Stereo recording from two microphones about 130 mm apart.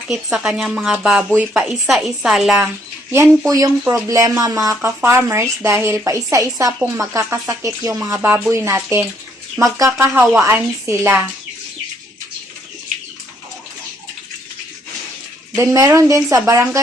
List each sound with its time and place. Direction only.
0.1 s a woman's voice: 5° right (ahead or behind)
3.1 s a woman's voice: 25° right (ahead or behind)
15.5 s speech: 20° right (ahead or behind)